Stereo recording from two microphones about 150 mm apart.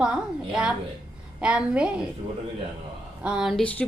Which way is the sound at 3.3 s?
5° right (ahead or behind).